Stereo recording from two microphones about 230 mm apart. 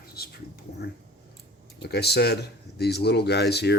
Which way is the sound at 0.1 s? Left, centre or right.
Left.